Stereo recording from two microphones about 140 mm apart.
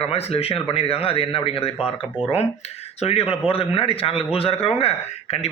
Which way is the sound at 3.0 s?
45° left (ahead or behind).